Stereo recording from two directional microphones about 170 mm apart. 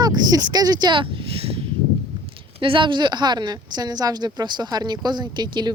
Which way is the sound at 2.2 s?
30° right (ahead or behind).